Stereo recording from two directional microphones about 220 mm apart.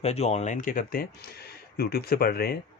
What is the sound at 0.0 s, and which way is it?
Speech, 30° left (ahead or behind).